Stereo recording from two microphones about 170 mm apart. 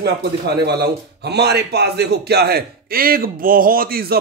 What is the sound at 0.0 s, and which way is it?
A man's voice, 75° right (ahead or behind).